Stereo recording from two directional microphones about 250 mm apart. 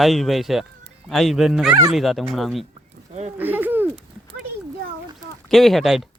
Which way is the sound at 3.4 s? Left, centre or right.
Centre.